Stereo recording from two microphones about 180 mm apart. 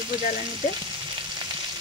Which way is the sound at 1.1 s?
25° right (ahead or behind).